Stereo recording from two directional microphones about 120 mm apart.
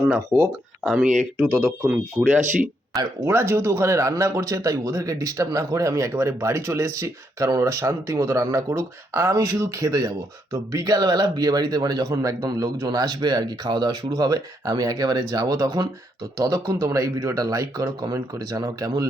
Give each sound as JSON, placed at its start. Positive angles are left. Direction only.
{"t": 0.3, "sound": "speech", "side_deg": -5}
{"t": 1.5, "sound": "speech", "side_deg": -20}
{"t": 2.9, "sound": "speech", "side_deg": -25}